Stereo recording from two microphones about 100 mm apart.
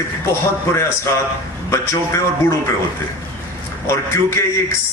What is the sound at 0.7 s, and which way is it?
A man's voice, 30° left (ahead or behind).